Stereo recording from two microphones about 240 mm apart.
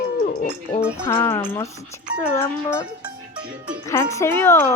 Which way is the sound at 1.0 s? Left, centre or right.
Centre.